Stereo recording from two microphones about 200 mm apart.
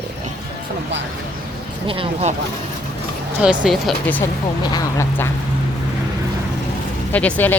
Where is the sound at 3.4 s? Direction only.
5° right (ahead or behind).